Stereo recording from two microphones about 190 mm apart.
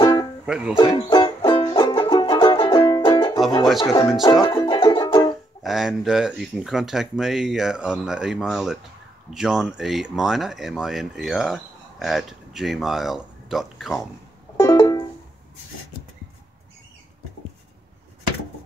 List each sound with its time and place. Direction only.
0.0 s music: 20° left (ahead or behind)
3.8 s speech: 15° left (ahead or behind)
4.2 s music: 20° left (ahead or behind)
5.6 s speech: centre (ahead or behind)
14.6 s music: 15° left (ahead or behind)